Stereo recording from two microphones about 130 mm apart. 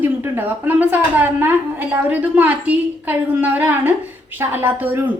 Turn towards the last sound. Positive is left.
turn(degrees=-15)  # may be behind; listen again after turning